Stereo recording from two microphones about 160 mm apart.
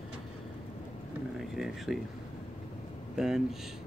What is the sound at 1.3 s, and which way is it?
Speech, centre (ahead or behind).